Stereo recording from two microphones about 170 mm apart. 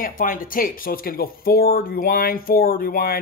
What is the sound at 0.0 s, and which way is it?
Speech, 55° left (ahead or behind).